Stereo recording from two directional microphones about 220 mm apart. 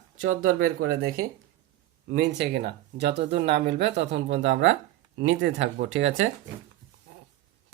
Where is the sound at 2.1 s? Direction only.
55° right (ahead or behind).